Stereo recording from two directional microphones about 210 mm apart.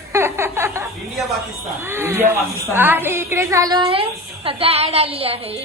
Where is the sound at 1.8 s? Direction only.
10° right (ahead or behind).